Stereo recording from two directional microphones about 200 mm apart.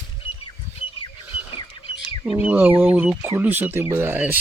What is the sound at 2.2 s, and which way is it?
Speech, 10° right (ahead or behind).